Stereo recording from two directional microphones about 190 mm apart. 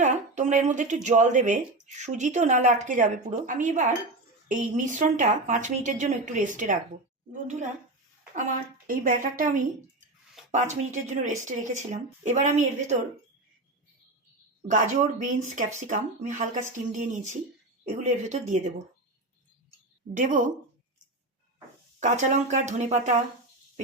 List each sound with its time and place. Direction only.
0.0 s speech: 40° right (ahead or behind)
8.4 s a woman's voice: 45° right (ahead or behind)
14.7 s speech: 40° right (ahead or behind)
20.1 s a woman's voice: 45° right (ahead or behind)
22.0 s speech: 40° right (ahead or behind)